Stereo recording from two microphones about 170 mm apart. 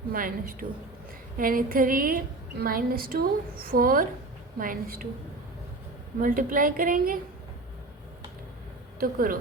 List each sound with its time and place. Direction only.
0.1 s a woman's voice: 55° right (ahead or behind)
6.1 s a woman's voice: 55° right (ahead or behind)
9.0 s a woman's voice: 55° right (ahead or behind)